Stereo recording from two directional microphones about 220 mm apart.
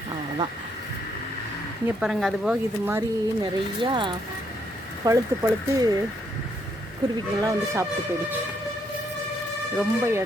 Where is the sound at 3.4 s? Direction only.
20° right (ahead or behind).